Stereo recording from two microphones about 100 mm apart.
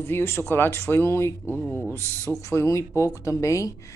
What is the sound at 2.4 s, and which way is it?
Speech, 30° left (ahead or behind).